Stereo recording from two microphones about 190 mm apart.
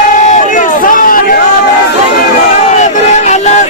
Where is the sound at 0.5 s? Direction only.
45° left (ahead or behind).